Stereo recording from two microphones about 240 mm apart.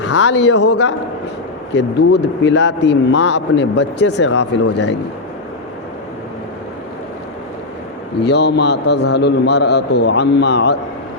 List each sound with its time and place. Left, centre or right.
0.2 s speech: left
8.2 s speech: left